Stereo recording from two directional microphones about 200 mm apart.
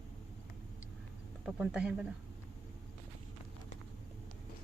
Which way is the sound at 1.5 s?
Centre (ahead or behind).